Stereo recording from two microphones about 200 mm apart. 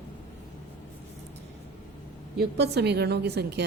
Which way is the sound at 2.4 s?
55° right (ahead or behind).